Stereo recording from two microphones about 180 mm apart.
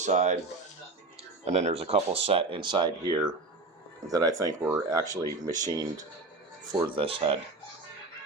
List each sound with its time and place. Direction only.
0.0 s speech: 40° right (ahead or behind)
1.5 s speech: 40° right (ahead or behind)
4.1 s speech: 20° right (ahead or behind)